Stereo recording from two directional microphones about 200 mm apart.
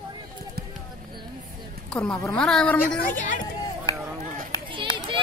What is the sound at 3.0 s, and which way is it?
Speech, 40° left (ahead or behind).